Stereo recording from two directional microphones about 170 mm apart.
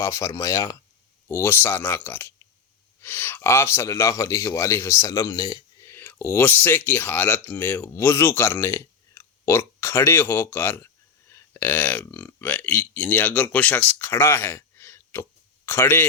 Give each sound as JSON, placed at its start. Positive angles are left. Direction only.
{"t": 0.0, "sound": "a man's voice", "side_deg": 20}